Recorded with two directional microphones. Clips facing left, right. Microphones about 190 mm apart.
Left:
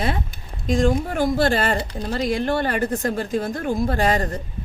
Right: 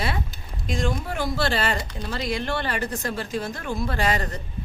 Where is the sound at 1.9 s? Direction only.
35° left (ahead or behind).